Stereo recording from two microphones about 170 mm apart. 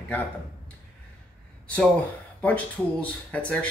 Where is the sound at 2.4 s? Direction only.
10° left (ahead or behind).